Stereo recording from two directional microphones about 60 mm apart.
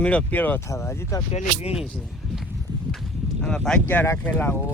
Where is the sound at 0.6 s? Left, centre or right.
Left.